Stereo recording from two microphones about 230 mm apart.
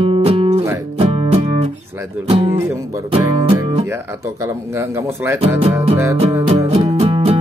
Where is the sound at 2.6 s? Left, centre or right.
Centre.